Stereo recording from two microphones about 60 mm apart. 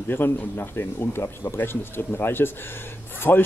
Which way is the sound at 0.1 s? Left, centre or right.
Left.